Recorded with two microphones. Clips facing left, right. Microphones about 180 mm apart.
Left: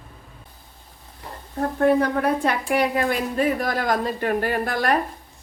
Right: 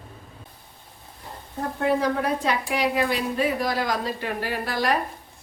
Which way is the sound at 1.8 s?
55° left (ahead or behind).